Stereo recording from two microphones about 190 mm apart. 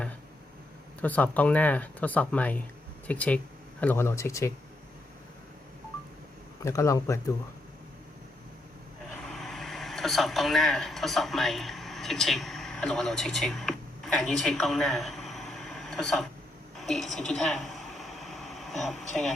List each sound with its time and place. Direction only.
1.0 s speech: 10° left (ahead or behind)
6.6 s speech: 15° left (ahead or behind)
9.2 s speech: centre (ahead or behind)
16.8 s a sound: centre (ahead or behind)